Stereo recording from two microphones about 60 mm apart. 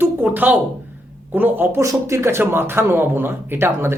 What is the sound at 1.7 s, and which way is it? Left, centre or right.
Speech, right.